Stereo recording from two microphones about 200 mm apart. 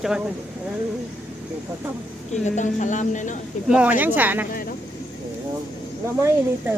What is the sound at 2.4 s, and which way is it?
Speech, 35° left (ahead or behind).